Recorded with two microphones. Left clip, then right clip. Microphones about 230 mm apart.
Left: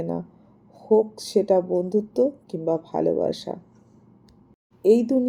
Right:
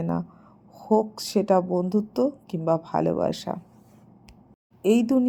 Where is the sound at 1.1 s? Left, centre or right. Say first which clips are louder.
Left 2 dB; right.